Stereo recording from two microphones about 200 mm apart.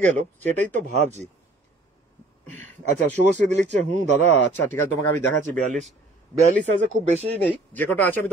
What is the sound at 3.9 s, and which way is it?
Speech, 65° left (ahead or behind).